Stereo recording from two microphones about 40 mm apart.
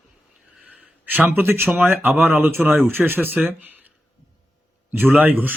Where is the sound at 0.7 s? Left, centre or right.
Right.